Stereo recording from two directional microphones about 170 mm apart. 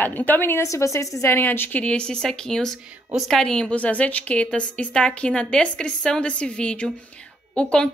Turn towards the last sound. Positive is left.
turn(degrees=5)  # may be behind; listen again after turning